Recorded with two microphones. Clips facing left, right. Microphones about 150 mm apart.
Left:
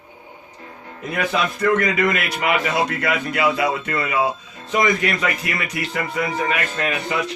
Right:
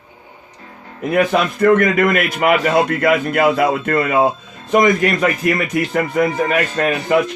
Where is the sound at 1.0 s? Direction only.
55° right (ahead or behind).